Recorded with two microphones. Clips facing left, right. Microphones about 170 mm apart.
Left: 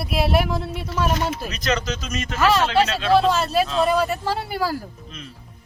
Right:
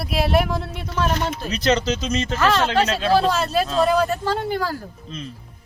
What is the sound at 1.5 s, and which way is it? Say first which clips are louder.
Speech: right 4 dB; 30° right (ahead or behind).